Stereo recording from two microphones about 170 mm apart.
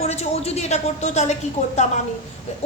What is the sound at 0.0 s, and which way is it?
A woman's voice, 40° left (ahead or behind).